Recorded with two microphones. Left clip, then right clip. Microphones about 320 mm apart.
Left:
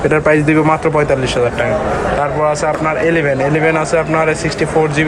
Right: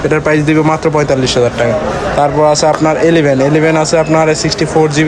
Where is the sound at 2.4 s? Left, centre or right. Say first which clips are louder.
Right 5 dB; centre.